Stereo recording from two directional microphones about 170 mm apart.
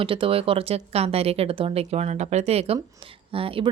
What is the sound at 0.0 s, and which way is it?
Speech, 30° right (ahead or behind).